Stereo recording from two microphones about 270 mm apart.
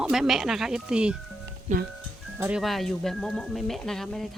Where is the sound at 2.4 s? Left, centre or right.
Centre.